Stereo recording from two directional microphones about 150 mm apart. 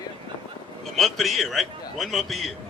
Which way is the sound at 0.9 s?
Centre (ahead or behind).